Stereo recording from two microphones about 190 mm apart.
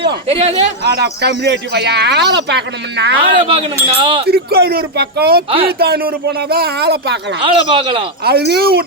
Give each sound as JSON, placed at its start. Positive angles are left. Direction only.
{"t": 0.3, "sound": "a man's voice", "side_deg": -30}
{"t": 0.9, "sound": "speech", "side_deg": -60}
{"t": 3.2, "sound": "speech", "side_deg": -30}
{"t": 4.3, "sound": "speech", "side_deg": -55}
{"t": 5.5, "sound": "speech", "side_deg": -30}
{"t": 5.8, "sound": "speech", "side_deg": -55}
{"t": 7.4, "sound": "speech", "side_deg": -30}
{"t": 8.2, "sound": "speech", "side_deg": -55}